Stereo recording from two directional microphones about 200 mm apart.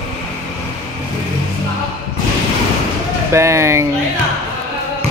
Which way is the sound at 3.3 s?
15° right (ahead or behind).